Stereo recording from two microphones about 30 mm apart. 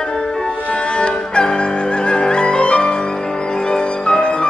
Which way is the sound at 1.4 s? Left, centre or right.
Left.